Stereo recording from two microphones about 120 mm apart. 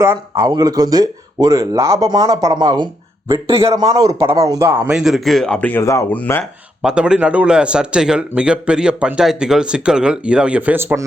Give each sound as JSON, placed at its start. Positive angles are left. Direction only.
{"t": 0.0, "sound": "a man's voice", "side_deg": -25}
{"t": 3.5, "sound": "a man's voice", "side_deg": -25}
{"t": 4.9, "sound": "speech", "side_deg": -5}
{"t": 5.8, "sound": "speech", "side_deg": 25}
{"t": 6.8, "sound": "a man's voice", "side_deg": -5}
{"t": 10.8, "sound": "a man's voice", "side_deg": -20}